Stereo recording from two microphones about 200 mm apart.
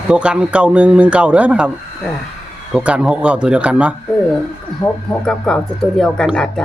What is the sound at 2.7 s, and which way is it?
A woman's voice, 5° right (ahead or behind).